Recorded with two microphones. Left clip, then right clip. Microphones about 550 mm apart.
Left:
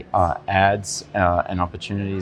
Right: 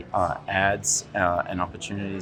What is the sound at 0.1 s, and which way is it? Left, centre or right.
Speech, left.